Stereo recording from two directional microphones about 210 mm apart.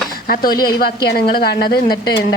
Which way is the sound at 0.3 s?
45° left (ahead or behind).